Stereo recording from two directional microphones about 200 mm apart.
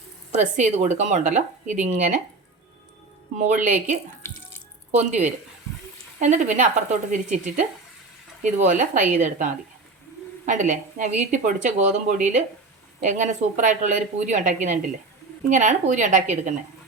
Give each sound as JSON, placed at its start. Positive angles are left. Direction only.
{"t": 0.3, "sound": "speech", "side_deg": -35}
{"t": 3.3, "sound": "speech", "side_deg": -40}